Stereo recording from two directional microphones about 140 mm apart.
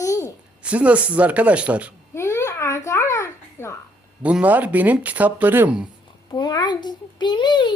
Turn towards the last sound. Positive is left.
turn(degrees=35)  # may be behind; listen again after turning